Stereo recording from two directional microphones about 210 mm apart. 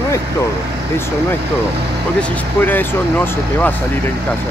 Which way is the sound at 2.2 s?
10° left (ahead or behind).